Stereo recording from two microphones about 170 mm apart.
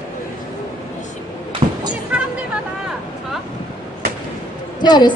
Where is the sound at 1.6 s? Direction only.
30° right (ahead or behind).